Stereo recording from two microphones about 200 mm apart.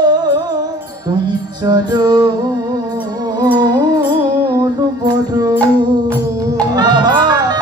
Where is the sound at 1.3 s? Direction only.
20° right (ahead or behind).